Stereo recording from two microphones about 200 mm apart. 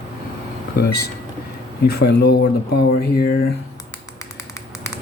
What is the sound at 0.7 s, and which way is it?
Speech, 55° left (ahead or behind).